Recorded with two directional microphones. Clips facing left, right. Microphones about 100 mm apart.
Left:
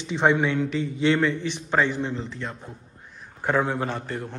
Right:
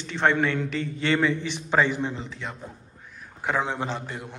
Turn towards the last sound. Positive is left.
turn(degrees=-15)  # may be behind; listen again after turning